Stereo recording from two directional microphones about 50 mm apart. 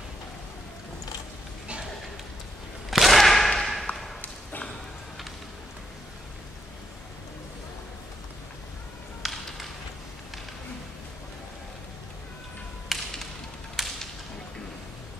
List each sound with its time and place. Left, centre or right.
2.9 s whip: centre
3.8 s arrow: centre
4.2 s a sound: left
9.2 s music: centre
12.9 s music: centre
13.8 s whip: centre